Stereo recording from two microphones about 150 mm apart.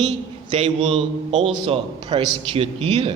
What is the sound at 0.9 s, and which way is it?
A man's voice, 45° right (ahead or behind).